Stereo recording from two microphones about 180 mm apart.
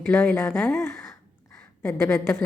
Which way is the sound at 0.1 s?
10° left (ahead or behind).